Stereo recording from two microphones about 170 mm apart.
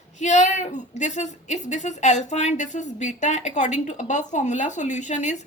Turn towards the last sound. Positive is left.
turn(degrees=45)  # may be behind; listen again after turning